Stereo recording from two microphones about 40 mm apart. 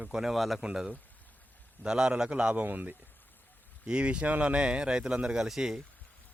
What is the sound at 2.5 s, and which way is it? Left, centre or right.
Speech, right.